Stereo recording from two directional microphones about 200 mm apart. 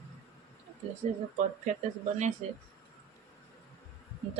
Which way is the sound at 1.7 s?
35° right (ahead or behind).